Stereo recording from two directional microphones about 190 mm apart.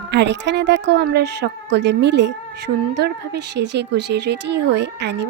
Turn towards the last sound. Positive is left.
turn(degrees=-65)  # may be behind; listen again after turning